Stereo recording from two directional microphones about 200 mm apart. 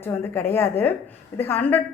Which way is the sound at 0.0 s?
10° left (ahead or behind).